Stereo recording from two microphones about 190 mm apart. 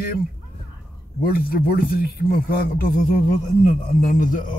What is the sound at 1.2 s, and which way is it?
Speech, 50° left (ahead or behind).